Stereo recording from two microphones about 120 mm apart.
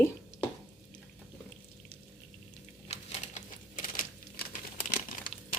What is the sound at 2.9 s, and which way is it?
Typewriter, 75° left (ahead or behind).